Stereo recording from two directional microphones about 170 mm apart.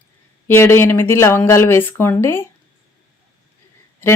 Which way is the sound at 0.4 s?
15° left (ahead or behind).